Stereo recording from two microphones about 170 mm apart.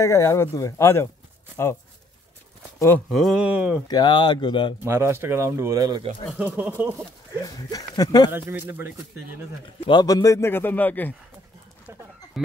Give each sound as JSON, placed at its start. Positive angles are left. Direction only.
{"t": 0.0, "sound": "a man's voice", "side_deg": 15}
{"t": 3.1, "sound": "speech", "side_deg": 0}
{"t": 3.8, "sound": "speech", "side_deg": 25}
{"t": 4.8, "sound": "speech", "side_deg": -15}
{"t": 6.3, "sound": "speech", "side_deg": -10}
{"t": 7.4, "sound": "speech", "side_deg": 20}
{"t": 8.3, "sound": "speech", "side_deg": -10}
{"t": 9.8, "sound": "a man's voice", "side_deg": 25}